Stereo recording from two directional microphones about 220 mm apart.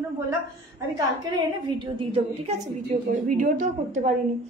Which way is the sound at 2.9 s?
25° right (ahead or behind).